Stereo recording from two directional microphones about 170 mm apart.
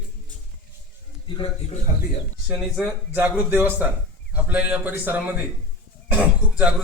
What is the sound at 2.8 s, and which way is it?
Speech, 10° right (ahead or behind).